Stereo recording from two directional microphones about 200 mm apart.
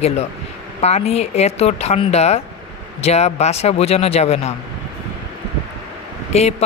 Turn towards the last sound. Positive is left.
turn(degrees=35)  # may be behind; listen again after turning